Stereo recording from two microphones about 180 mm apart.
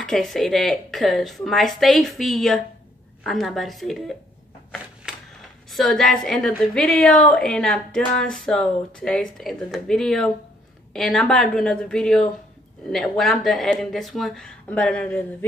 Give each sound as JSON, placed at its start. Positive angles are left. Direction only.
{"t": 0.0, "sound": "a woman's voice", "side_deg": 0}
{"t": 5.7, "sound": "a woman's voice", "side_deg": 0}